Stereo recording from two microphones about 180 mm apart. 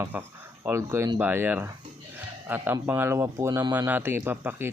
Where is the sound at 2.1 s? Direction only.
10° right (ahead or behind).